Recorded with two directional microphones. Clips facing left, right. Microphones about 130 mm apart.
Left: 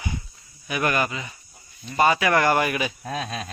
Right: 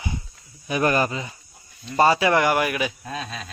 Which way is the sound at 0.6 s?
30° right (ahead or behind).